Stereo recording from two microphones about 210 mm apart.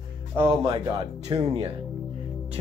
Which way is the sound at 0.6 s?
25° right (ahead or behind).